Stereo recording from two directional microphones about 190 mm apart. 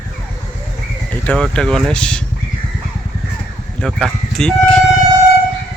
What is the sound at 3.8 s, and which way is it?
Speech, 5° left (ahead or behind).